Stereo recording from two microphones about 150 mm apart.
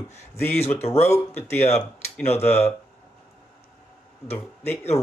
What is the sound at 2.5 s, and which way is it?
Speech, 15° left (ahead or behind).